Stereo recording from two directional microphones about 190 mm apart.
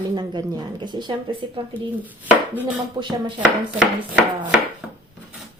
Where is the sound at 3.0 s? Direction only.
25° right (ahead or behind).